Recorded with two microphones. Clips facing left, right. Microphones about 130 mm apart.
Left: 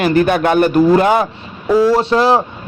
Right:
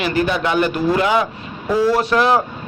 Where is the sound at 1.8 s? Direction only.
30° left (ahead or behind).